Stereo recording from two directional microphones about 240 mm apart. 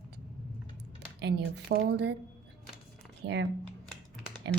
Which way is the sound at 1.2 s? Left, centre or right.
Right.